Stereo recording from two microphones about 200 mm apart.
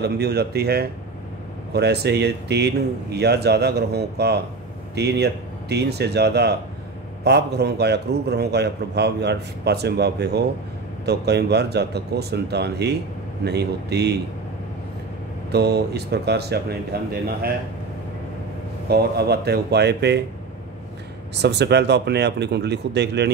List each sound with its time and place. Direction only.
0.0 s a man's voice: 55° right (ahead or behind)
15.5 s a man's voice: 55° right (ahead or behind)
18.9 s a man's voice: 55° right (ahead or behind)
21.4 s a man's voice: 55° right (ahead or behind)